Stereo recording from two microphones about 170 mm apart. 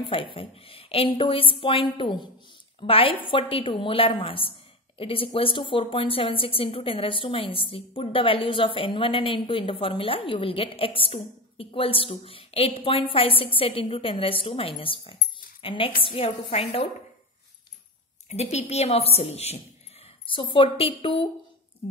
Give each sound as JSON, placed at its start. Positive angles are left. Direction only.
{"t": 0.1, "sound": "a woman's voice", "side_deg": 35}
{"t": 18.3, "sound": "a woman's voice", "side_deg": 40}